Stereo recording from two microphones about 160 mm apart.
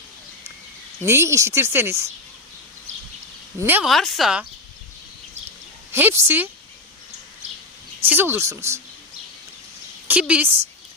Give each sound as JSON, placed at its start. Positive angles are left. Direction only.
{"t": 1.0, "sound": "speech", "side_deg": -15}
{"t": 3.6, "sound": "speech", "side_deg": -10}
{"t": 3.8, "sound": "speech", "side_deg": 0}
{"t": 5.9, "sound": "speech", "side_deg": -15}
{"t": 8.0, "sound": "speech", "side_deg": -10}
{"t": 10.1, "sound": "a woman's voice", "side_deg": -10}